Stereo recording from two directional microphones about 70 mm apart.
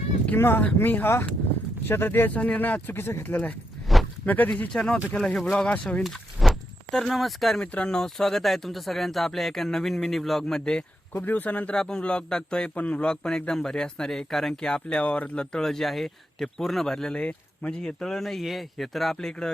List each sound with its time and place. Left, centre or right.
0.3 s speech: left
3.9 s a sound: centre
4.3 s a man's voice: left
6.4 s walk: centre
6.9 s speech: centre
7.6 s speech: centre
11.1 s speech: left
11.7 s a man's voice: centre